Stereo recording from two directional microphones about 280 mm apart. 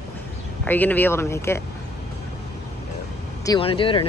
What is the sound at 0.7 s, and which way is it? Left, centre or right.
Speech, centre.